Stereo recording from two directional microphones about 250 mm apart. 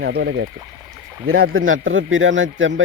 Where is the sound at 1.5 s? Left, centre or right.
Right.